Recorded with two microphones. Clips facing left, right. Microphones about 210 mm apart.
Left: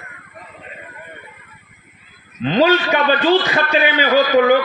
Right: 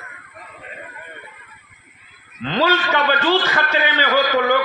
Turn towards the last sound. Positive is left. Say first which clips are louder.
# left 5 dB
turn(degrees=15)  # may be behind; listen again after turning